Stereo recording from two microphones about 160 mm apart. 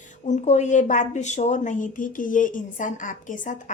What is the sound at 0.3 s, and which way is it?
A woman's voice, 45° left (ahead or behind).